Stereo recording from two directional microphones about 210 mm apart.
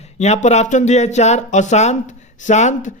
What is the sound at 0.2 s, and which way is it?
Speech, 30° left (ahead or behind).